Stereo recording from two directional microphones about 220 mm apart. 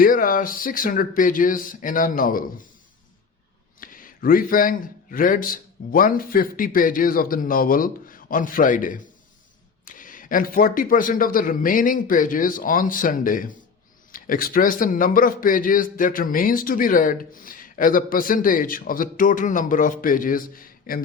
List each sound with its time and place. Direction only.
0.0 s a man's voice: 40° left (ahead or behind)
3.8 s a man's voice: 40° left (ahead or behind)